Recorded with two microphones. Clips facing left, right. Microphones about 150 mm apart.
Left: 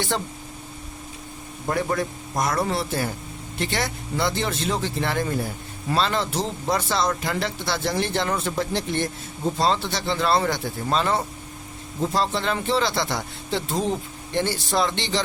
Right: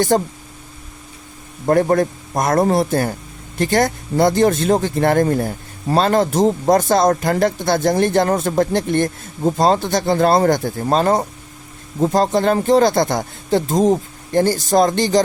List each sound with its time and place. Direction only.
0.1 s speech: 45° right (ahead or behind)
1.6 s speech: 50° right (ahead or behind)